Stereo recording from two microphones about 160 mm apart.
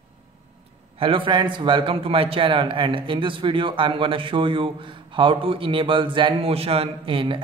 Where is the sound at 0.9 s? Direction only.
35° right (ahead or behind).